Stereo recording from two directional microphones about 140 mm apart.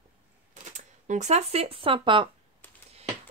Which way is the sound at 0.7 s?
60° right (ahead or behind).